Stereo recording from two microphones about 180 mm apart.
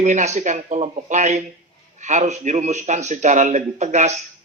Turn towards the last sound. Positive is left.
turn(degrees=-40)  # may be behind; listen again after turning